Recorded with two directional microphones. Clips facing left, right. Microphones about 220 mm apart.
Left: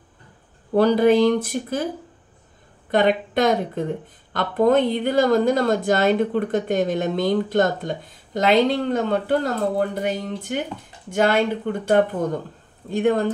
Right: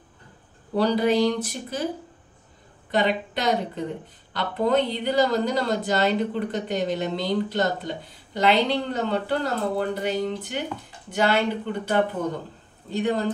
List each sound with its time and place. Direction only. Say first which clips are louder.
0.7 s speech: left 5 dB; 50° left (ahead or behind)
2.9 s speech: left 5 dB; 50° left (ahead or behind)